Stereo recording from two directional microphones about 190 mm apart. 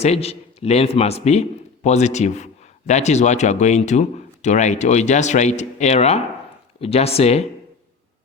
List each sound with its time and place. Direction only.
0.0 s a man's voice: 35° left (ahead or behind)